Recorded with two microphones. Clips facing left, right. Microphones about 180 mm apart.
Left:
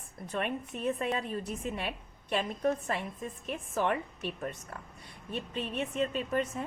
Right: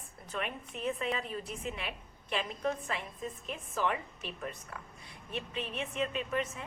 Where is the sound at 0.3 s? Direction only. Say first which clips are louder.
Left 4 dB; 45° left (ahead or behind).